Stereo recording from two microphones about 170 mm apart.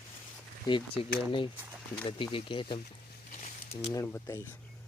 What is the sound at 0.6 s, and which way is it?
Speech, 30° left (ahead or behind).